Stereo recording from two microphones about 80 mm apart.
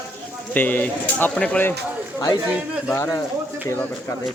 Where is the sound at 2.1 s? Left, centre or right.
Left.